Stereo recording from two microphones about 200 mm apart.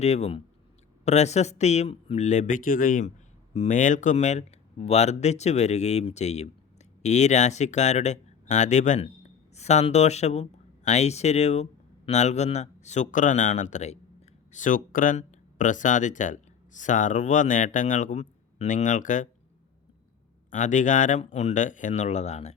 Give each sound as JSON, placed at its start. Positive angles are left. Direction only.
{"t": 0.0, "sound": "speech", "side_deg": 35}
{"t": 20.5, "sound": "speech", "side_deg": 40}